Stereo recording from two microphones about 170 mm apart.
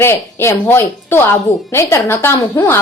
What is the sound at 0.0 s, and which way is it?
A woman's voice, 15° left (ahead or behind).